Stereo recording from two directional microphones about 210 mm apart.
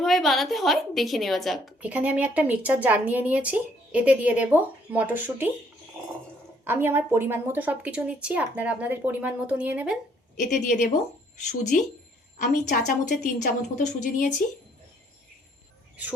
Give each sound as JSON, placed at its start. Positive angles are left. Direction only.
{"t": 0.0, "sound": "a woman's voice", "side_deg": 0}
{"t": 6.7, "sound": "a woman's voice", "side_deg": -10}
{"t": 10.3, "sound": "a woman's voice", "side_deg": 35}